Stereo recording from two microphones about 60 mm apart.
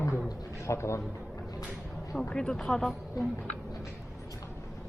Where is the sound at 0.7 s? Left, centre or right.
Left.